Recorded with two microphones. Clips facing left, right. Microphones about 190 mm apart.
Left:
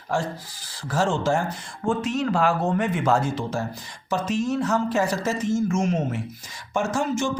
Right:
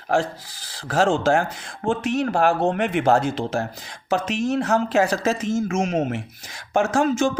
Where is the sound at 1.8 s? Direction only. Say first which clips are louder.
Right 2 dB; 65° right (ahead or behind).